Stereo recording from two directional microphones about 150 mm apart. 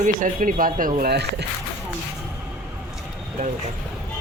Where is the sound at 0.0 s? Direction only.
60° right (ahead or behind); by 1.5 s 90° right.